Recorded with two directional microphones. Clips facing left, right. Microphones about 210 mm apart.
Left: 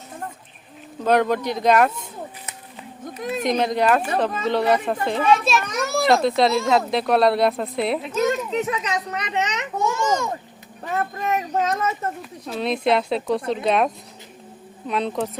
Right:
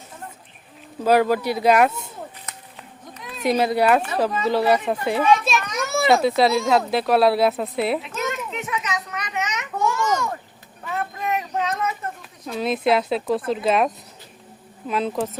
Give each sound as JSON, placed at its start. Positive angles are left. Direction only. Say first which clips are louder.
{"t": 1.0, "sound": "speech", "louder": "right 1 dB", "side_deg": -5}
{"t": 3.2, "sound": "a sound", "louder": "left 12 dB", "side_deg": 45}
{"t": 3.4, "sound": "a child's voice", "louder": "right 2 dB", "side_deg": -5}
{"t": 8.0, "sound": "a child's voice", "louder": "left 6 dB", "side_deg": 35}
{"t": 11.2, "sound": "a child's voice", "louder": "left 1 dB", "side_deg": 40}
{"t": 12.5, "sound": "a child's voice", "louder": "even", "side_deg": 0}